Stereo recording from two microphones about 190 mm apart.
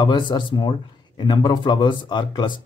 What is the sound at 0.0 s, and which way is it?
Speech, 25° left (ahead or behind).